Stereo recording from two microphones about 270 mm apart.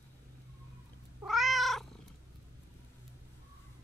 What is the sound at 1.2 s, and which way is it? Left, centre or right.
Cat, centre.